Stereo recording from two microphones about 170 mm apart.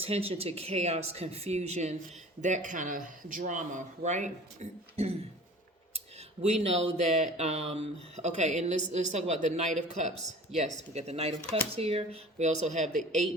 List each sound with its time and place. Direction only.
0.0 s speech: 35° right (ahead or behind)
6.4 s speech: 40° right (ahead or behind)
12.9 s speech: centre (ahead or behind)